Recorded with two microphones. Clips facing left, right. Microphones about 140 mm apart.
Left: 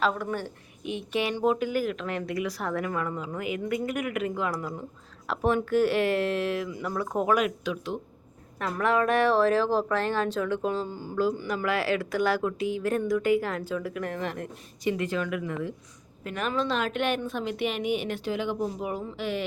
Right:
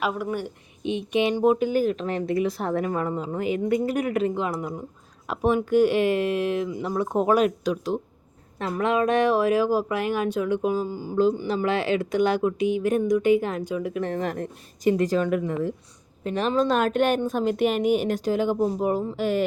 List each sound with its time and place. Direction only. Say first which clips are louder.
0.0 s speech: right 1 dB; 10° right (ahead or behind); by 8.0 s 40° right (ahead or behind)
8.5 s speech: right 2 dB; 20° right (ahead or behind)
11.2 s speech: right 5 dB; 25° right (ahead or behind)
16.6 s speech: right 6 dB; 45° right (ahead or behind)